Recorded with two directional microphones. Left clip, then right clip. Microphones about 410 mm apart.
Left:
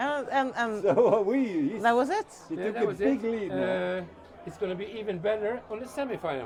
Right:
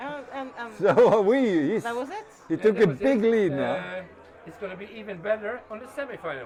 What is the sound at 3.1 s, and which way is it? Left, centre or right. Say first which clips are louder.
Speech: right 8 dB; right.